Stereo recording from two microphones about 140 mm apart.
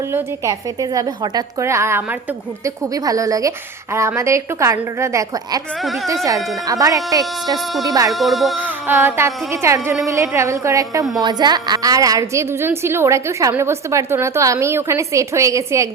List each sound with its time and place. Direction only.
0.1 s a woman's voice: 20° right (ahead or behind)
7.7 s music: centre (ahead or behind)
8.5 s a woman's voice: 15° right (ahead or behind)